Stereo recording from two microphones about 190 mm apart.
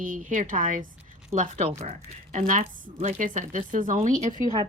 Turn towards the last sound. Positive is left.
turn(degrees=-40)  # may be behind; listen again after turning